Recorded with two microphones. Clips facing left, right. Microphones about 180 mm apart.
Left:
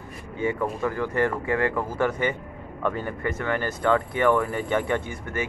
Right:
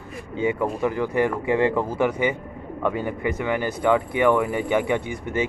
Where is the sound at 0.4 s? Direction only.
15° right (ahead or behind).